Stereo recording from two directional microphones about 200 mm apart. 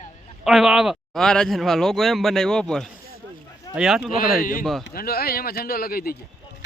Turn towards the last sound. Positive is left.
turn(degrees=50)  # may be behind; listen again after turning